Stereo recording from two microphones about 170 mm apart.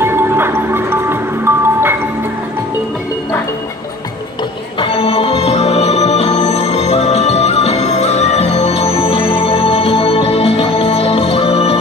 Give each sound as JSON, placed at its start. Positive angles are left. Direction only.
{"t": 0.0, "sound": "music", "side_deg": -15}
{"t": 4.7, "sound": "music", "side_deg": 30}